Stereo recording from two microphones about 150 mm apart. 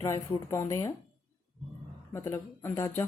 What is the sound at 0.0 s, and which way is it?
Speech, 20° left (ahead or behind).